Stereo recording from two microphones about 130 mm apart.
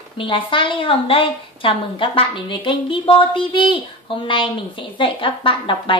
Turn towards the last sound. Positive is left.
turn(degrees=40)  # may be behind; listen again after turning